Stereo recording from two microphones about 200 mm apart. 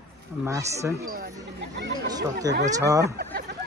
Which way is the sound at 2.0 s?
20° right (ahead or behind).